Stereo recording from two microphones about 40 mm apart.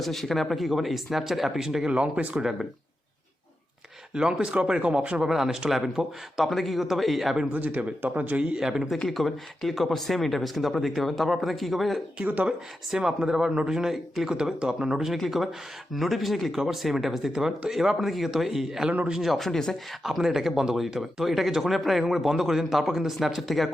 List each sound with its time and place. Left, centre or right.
0.0 s speech: centre
1.9 s speech: right
2.4 s speech: centre
4.1 s speech: right
5.3 s speech: centre
7.5 s speech: right
8.5 s speech: centre
9.0 s speech: centre
12.2 s speech: right
13.0 s speech: centre
15.0 s speech: centre
19.5 s speech: centre
20.1 s speech: centre